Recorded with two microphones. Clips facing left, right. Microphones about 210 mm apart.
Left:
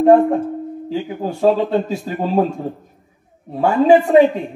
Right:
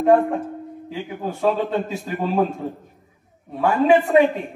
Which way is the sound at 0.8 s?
35° left (ahead or behind).